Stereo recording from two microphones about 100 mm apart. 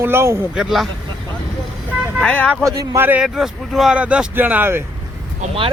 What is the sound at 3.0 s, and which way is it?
Speech, 15° right (ahead or behind).